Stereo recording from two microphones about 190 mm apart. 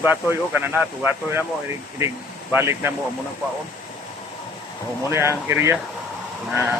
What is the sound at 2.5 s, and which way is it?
Speech, 10° right (ahead or behind).